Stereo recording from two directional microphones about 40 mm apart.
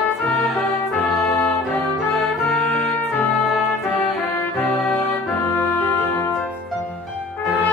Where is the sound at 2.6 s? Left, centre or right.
Centre.